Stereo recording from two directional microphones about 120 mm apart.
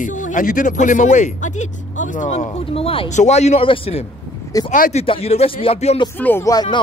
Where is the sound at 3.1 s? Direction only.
70° left (ahead or behind).